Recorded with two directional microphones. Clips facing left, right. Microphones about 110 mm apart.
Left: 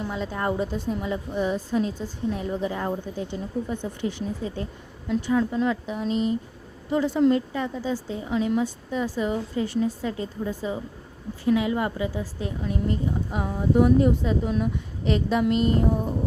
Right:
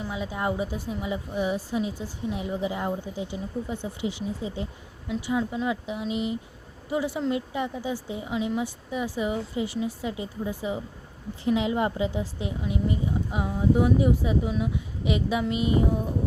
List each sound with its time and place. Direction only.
0.0 s a woman's voice: 10° right (ahead or behind)